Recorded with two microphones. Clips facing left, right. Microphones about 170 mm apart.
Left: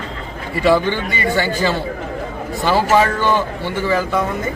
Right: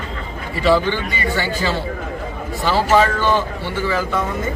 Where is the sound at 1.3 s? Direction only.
50° left (ahead or behind).